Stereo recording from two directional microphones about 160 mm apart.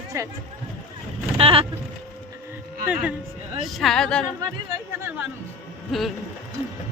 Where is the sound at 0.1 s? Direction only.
20° right (ahead or behind).